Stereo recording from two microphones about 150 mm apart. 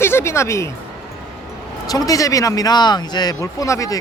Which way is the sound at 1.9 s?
25° left (ahead or behind).